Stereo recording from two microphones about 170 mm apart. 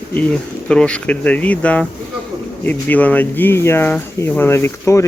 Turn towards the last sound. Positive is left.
turn(degrees=15)  # may be behind; listen again after turning